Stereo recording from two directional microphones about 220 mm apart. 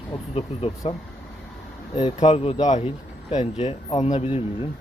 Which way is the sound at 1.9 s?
25° left (ahead or behind).